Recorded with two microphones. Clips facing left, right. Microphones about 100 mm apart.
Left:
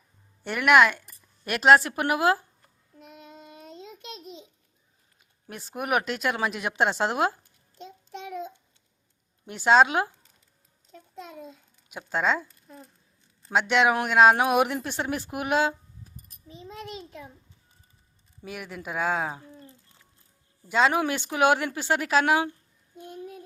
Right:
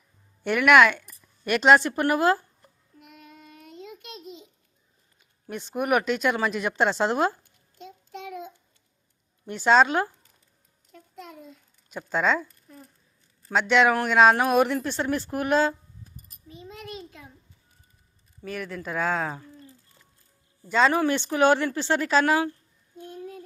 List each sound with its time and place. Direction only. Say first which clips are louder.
0.5 s a woman's voice: right 2 dB; centre (ahead or behind)
3.2 s child singing: left 2 dB; 25° left (ahead or behind)
5.5 s a woman's voice: right 4 dB; 5° left (ahead or behind)
9.5 s speech: even; 10° left (ahead or behind)
11.9 s a woman's voice: right 2 dB; 10° left (ahead or behind)
13.5 s speech: right 2 dB; 5° left (ahead or behind)
16.5 s a sound: left 1 dB; 30° left (ahead or behind)
18.4 s speech: right 3 dB; 10° left (ahead or behind)
20.7 s speech: right 2 dB; 10° left (ahead or behind)